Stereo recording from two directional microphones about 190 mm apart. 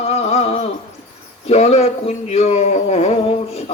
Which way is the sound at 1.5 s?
35° left (ahead or behind).